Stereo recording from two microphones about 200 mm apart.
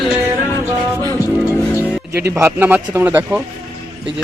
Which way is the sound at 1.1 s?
10° left (ahead or behind).